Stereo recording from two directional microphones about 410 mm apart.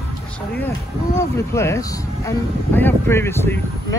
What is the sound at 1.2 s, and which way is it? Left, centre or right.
Speech, centre.